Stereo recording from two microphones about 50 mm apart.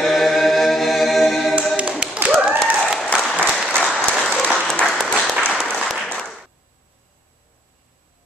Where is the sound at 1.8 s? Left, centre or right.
Right.